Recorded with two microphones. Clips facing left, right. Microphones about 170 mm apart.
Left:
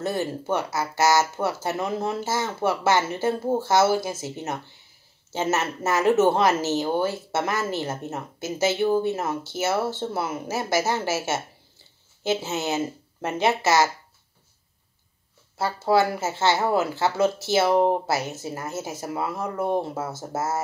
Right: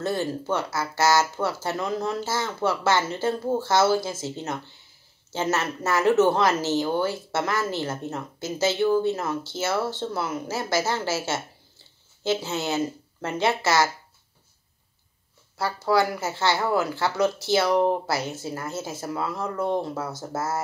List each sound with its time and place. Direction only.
0.0 s speech: 20° left (ahead or behind)
15.5 s speech: 25° left (ahead or behind)